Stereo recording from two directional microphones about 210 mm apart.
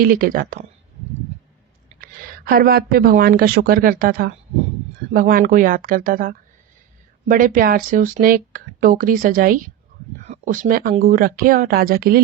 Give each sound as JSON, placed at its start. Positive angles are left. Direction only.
{"t": 0.0, "sound": "speech", "side_deg": -40}
{"t": 2.0, "sound": "speech", "side_deg": -45}